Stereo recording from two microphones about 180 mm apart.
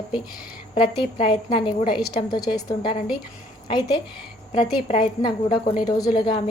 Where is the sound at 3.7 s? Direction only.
25° left (ahead or behind).